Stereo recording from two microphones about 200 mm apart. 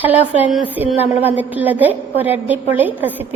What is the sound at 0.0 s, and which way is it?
A woman's voice, 10° right (ahead or behind).